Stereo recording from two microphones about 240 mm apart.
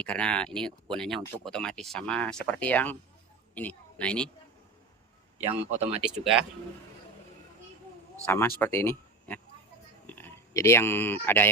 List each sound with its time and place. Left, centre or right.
0.0 s a woman's voice: centre
5.5 s speech: right
8.2 s speech: centre